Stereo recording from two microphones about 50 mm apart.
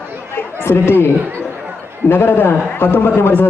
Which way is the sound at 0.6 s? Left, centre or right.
Left.